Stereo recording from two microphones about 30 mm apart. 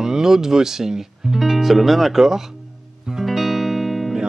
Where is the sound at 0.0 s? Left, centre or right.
Centre.